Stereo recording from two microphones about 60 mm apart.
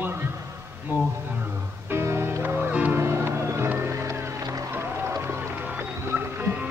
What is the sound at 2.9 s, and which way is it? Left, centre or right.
Music, right.